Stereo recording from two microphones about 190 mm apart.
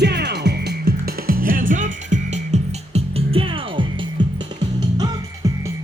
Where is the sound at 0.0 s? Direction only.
60° right (ahead or behind); by 4.4 s 25° right (ahead or behind).